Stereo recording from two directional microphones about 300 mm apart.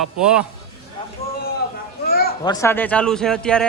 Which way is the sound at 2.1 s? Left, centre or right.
Left.